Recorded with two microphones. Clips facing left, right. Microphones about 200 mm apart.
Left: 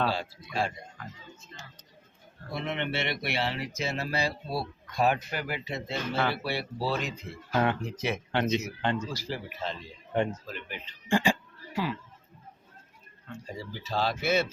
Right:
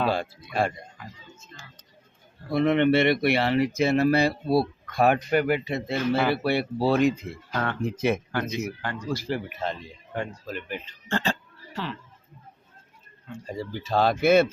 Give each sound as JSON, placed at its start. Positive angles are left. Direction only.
{"t": 0.1, "sound": "speech", "side_deg": -55}
{"t": 2.5, "sound": "speech", "side_deg": -55}
{"t": 7.5, "sound": "speech", "side_deg": 15}
{"t": 7.9, "sound": "speech", "side_deg": -55}
{"t": 8.3, "sound": "speech", "side_deg": 25}
{"t": 9.1, "sound": "speech", "side_deg": -55}
{"t": 11.1, "sound": "a sound", "side_deg": 10}
{"t": 13.6, "sound": "speech", "side_deg": -55}